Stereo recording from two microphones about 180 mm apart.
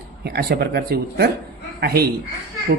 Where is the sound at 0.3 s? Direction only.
60° right (ahead or behind).